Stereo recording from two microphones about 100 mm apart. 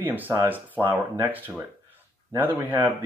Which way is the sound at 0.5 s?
20° right (ahead or behind).